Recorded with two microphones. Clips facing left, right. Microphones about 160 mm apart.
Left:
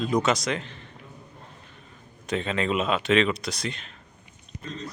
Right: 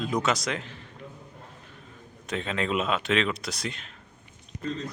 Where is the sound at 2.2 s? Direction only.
Centre (ahead or behind).